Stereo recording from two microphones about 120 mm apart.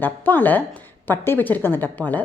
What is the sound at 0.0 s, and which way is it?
A woman's voice, 15° left (ahead or behind).